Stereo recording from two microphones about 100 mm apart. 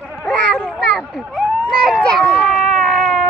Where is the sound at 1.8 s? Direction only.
10° left (ahead or behind).